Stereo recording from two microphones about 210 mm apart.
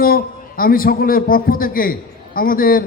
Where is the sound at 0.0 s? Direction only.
45° left (ahead or behind).